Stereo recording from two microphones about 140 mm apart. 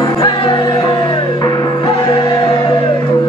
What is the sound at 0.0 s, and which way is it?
Music, 30° left (ahead or behind).